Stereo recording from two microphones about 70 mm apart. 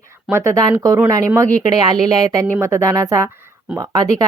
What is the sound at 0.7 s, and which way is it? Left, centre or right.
Speech, right.